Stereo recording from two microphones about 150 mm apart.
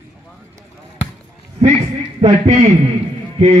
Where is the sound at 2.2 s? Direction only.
45° right (ahead or behind).